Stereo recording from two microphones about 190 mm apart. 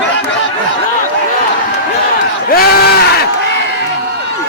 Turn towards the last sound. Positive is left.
turn(degrees=50)  # may be behind; listen again after turning